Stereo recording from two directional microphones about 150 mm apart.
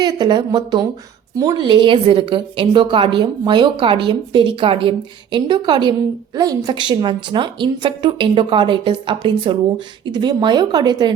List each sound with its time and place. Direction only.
0.0 s a woman's voice: 30° right (ahead or behind)